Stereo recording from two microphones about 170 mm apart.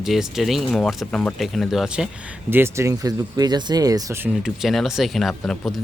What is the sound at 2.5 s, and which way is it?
Speech, 15° right (ahead or behind).